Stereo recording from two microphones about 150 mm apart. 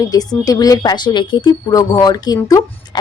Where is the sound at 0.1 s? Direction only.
25° left (ahead or behind).